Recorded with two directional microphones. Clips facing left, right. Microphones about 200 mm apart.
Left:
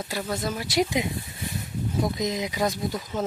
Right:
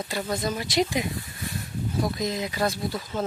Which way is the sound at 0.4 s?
5° left (ahead or behind).